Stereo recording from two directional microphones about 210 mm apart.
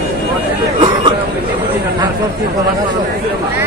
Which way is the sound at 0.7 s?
25° right (ahead or behind).